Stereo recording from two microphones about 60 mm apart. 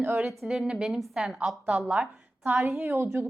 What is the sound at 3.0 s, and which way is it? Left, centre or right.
Speech, right.